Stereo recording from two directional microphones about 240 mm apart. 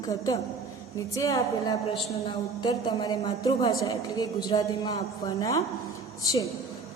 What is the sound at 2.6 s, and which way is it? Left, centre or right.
A woman's voice, centre.